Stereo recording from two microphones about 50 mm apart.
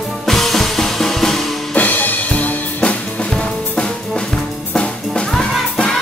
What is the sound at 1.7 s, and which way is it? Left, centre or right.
Music, left.